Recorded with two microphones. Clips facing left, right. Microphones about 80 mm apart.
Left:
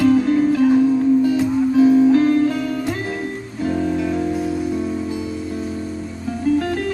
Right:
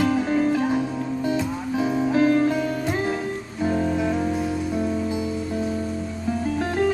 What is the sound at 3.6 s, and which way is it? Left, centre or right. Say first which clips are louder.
Music: left 2 dB; centre.